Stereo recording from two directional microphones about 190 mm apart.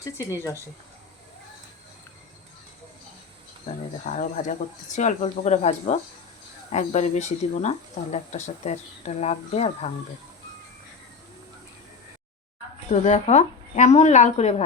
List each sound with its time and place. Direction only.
4.0 s speech: 40° left (ahead or behind)
12.9 s speech: 40° left (ahead or behind)